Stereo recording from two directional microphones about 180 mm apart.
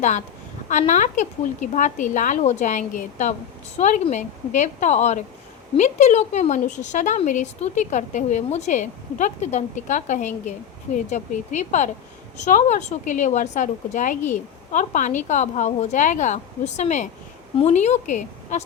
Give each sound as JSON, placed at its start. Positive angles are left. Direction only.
{"t": 0.7, "sound": "a woman's voice", "side_deg": 45}